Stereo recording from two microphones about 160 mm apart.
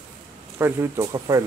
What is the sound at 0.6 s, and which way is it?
Speech, 20° right (ahead or behind).